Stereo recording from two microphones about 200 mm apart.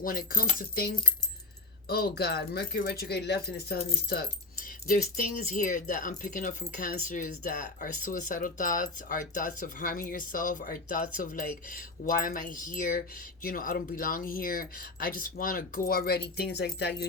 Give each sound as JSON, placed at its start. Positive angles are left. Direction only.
{"t": 0.0, "sound": "speech", "side_deg": 45}